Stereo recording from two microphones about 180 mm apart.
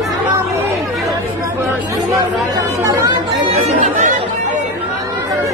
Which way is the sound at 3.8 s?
45° right (ahead or behind).